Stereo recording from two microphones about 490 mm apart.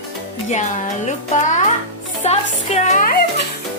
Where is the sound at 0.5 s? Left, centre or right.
Centre.